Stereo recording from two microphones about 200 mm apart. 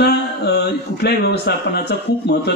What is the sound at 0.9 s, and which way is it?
A man's voice, 55° left (ahead or behind).